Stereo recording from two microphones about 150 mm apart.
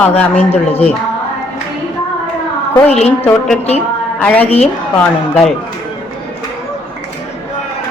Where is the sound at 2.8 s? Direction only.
45° left (ahead or behind).